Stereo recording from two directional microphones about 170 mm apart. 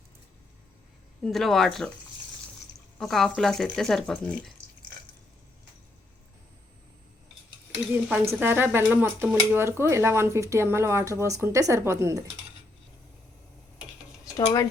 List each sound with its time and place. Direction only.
1.2 s speech: centre (ahead or behind)
3.0 s speech: centre (ahead or behind)
7.8 s speech: 5° right (ahead or behind)
14.3 s speech: 20° left (ahead or behind)